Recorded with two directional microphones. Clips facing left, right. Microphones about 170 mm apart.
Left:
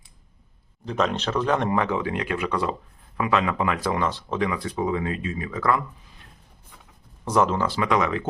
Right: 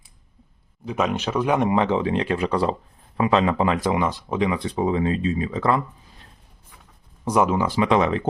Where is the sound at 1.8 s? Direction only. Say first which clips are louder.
Right 4 dB; 25° right (ahead or behind).